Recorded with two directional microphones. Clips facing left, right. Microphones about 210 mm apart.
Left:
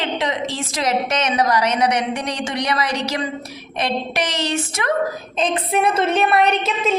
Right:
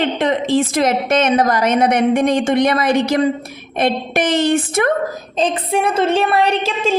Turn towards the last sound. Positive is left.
turn(degrees=-30)  # may be behind; listen again after turning